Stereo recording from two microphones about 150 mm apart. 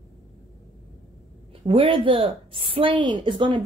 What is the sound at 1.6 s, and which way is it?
A woman's voice, 35° right (ahead or behind).